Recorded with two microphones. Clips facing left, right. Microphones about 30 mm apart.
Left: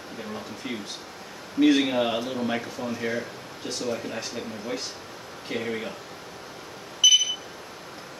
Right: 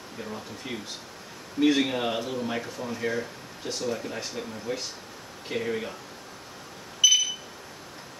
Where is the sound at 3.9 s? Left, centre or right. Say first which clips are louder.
Left 1 dB; centre.